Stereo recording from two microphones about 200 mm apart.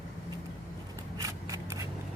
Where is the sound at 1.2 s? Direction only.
15° right (ahead or behind).